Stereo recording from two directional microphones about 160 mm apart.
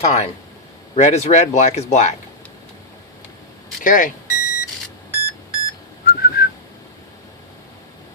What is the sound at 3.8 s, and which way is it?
Speech, 55° left (ahead or behind).